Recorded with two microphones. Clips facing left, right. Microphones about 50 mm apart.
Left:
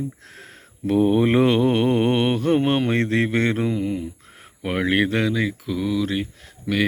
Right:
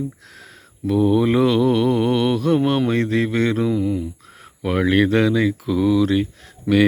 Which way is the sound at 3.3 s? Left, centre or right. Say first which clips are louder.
Right 2 dB; left.